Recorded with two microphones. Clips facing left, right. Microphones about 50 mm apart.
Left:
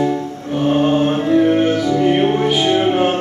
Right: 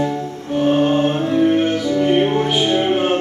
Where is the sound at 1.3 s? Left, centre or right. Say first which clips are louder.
Left 4 dB; left.